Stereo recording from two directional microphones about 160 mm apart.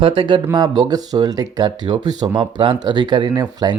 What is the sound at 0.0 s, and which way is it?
Speech, 30° right (ahead or behind).